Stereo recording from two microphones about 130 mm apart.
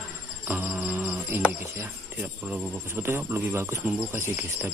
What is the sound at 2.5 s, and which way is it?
Speech, 15° right (ahead or behind).